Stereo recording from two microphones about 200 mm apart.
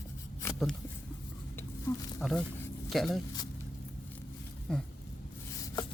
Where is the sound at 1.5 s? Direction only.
5° left (ahead or behind).